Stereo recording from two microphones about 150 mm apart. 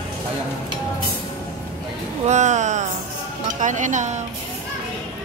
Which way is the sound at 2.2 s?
50° right (ahead or behind).